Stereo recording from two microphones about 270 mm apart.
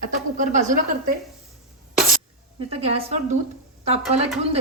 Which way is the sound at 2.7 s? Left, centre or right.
Right.